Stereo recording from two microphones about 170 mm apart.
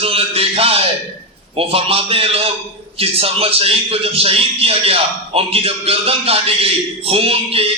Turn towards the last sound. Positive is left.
turn(degrees=-35)  # may be behind; listen again after turning